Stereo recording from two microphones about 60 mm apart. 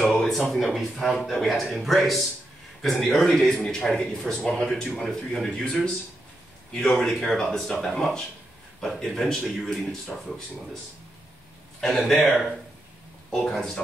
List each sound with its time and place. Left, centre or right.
0.1 s a man's voice: centre
6.7 s a man's voice: centre
11.8 s speech: centre
12.2 s a man's voice: centre
13.3 s speech: centre